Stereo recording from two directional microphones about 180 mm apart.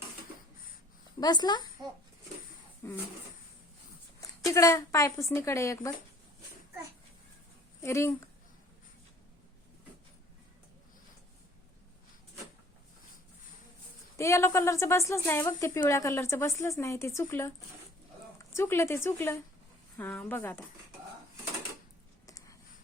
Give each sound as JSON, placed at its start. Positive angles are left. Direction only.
{"t": 1.2, "sound": "speech", "side_deg": 25}
{"t": 2.8, "sound": "a woman's voice", "side_deg": 15}
{"t": 4.4, "sound": "a woman's voice", "side_deg": 15}
{"t": 7.8, "sound": "speech", "side_deg": 15}
{"t": 14.2, "sound": "a woman's voice", "side_deg": 15}
{"t": 18.5, "sound": "a woman's voice", "side_deg": 15}
{"t": 22.3, "sound": "a sound", "side_deg": 20}